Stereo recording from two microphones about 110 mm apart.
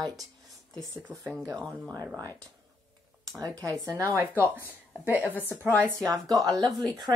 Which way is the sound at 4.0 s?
25° right (ahead or behind).